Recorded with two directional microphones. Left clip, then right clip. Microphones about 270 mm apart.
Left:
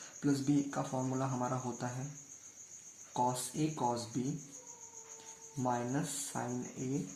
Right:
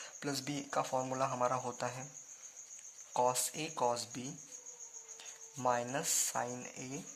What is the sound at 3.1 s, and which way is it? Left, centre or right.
Speech, right.